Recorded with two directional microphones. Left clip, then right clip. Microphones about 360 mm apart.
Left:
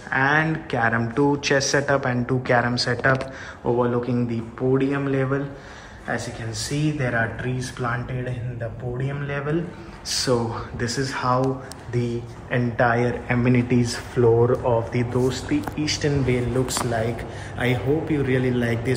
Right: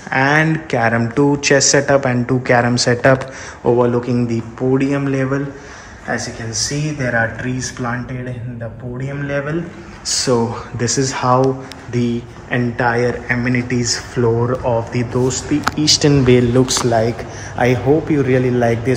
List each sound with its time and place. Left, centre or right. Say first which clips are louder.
0.1 s speech: right 6 dB; centre
16.3 s speech: right 11 dB; centre